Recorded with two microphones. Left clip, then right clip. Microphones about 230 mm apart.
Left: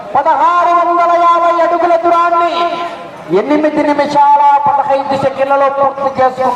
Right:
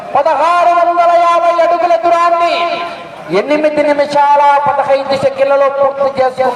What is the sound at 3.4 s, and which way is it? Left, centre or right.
A man's voice, centre.